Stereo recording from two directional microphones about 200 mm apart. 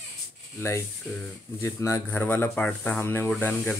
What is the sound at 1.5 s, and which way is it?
Speech, 15° left (ahead or behind).